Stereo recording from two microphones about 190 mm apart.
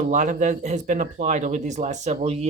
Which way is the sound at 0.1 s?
40° right (ahead or behind).